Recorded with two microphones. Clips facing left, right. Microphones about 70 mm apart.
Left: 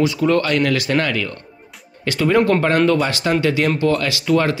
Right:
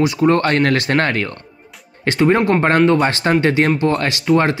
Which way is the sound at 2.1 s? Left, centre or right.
Right.